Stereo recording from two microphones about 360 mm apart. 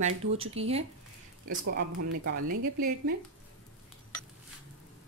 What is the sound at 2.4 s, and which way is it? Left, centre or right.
Speech, right.